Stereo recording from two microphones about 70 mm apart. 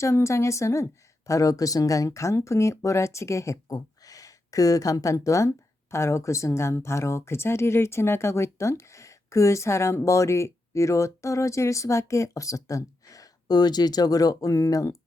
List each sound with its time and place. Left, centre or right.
0.0 s speech: left